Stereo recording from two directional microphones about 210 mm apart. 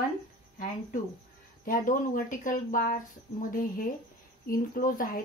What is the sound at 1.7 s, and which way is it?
Speech, 40° left (ahead or behind).